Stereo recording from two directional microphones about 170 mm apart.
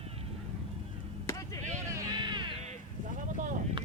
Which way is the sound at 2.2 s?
25° right (ahead or behind).